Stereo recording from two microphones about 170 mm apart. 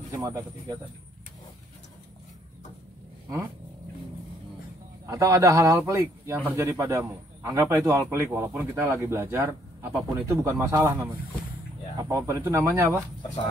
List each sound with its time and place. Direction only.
0.1 s speech: 20° right (ahead or behind)
5.0 s a man's voice: 20° right (ahead or behind)